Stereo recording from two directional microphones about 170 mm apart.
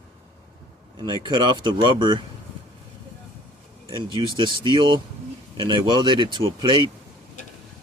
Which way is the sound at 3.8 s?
30° right (ahead or behind).